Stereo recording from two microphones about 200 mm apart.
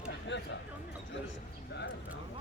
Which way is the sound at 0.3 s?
60° left (ahead or behind).